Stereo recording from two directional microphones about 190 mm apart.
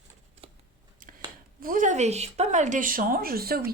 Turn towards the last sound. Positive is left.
turn(degrees=-50)  # may be behind; listen again after turning